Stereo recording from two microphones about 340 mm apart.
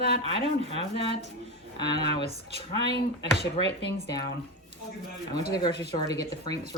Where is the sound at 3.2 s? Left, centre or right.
Left.